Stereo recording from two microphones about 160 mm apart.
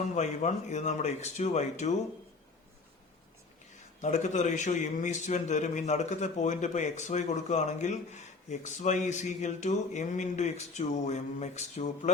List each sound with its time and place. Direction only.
0.1 s a man's voice: 45° left (ahead or behind)
4.0 s a man's voice: 45° left (ahead or behind)